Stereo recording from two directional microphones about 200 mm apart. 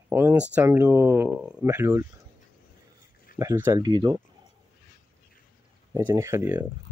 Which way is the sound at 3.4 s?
15° right (ahead or behind).